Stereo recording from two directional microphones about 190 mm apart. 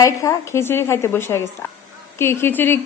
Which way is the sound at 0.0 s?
15° left (ahead or behind).